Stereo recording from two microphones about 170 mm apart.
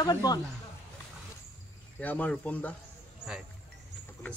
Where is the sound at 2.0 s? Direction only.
10° left (ahead or behind).